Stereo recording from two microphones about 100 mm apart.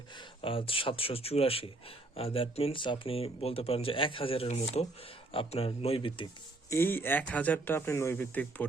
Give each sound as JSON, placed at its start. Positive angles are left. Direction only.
{"t": 0.2, "sound": "speech", "side_deg": 60}
{"t": 2.8, "sound": "speech", "side_deg": 55}
{"t": 5.3, "sound": "speech", "side_deg": 70}
{"t": 6.7, "sound": "speech", "side_deg": 25}